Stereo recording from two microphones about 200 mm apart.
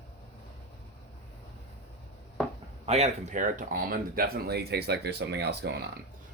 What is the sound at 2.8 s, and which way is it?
Speech, 35° right (ahead or behind).